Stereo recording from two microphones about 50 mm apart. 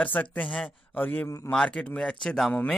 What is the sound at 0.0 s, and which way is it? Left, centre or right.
Speech, left.